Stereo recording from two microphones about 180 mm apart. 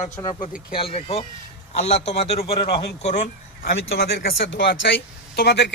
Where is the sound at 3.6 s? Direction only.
65° left (ahead or behind).